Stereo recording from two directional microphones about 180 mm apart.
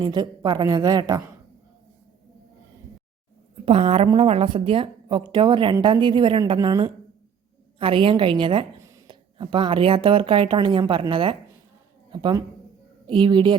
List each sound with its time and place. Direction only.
0.0 s a woman's voice: 25° right (ahead or behind)
3.7 s a woman's voice: 35° right (ahead or behind)